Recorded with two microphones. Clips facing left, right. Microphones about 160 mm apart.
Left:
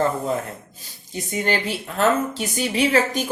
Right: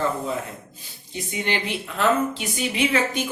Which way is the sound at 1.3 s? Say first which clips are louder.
Left 3 dB; 45° left (ahead or behind).